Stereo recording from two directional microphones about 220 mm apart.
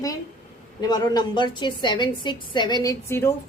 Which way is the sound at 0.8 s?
20° left (ahead or behind).